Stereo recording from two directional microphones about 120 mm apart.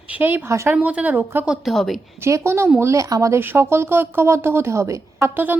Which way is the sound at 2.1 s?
20° right (ahead or behind).